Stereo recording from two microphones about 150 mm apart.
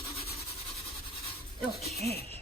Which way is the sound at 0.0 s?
40° left (ahead or behind).